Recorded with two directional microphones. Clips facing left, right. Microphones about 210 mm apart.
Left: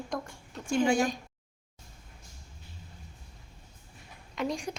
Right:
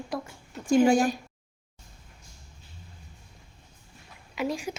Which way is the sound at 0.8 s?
35° right (ahead or behind).